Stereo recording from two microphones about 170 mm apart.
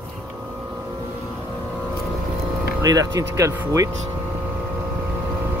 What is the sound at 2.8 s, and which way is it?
Speech, 20° right (ahead or behind).